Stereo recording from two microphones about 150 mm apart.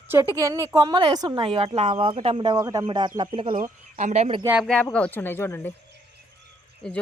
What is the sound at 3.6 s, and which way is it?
Speech, 55° right (ahead or behind).